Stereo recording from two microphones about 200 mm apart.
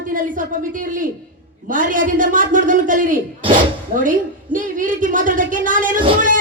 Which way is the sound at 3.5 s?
40° right (ahead or behind).